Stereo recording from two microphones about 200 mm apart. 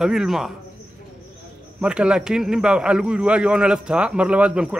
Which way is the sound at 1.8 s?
5° right (ahead or behind).